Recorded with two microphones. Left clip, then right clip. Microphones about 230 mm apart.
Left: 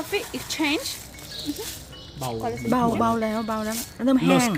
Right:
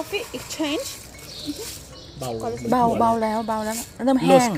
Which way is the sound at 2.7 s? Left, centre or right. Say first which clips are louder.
Right 4 dB; centre.